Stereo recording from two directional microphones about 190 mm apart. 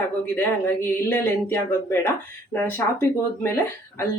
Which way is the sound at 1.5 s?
10° left (ahead or behind).